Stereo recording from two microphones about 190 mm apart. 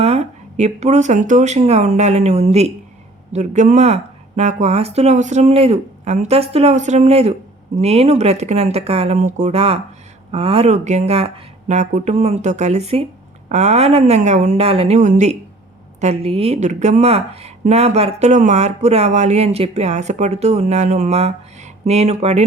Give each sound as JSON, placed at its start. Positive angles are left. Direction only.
{"t": 0.0, "sound": "a woman's voice", "side_deg": -35}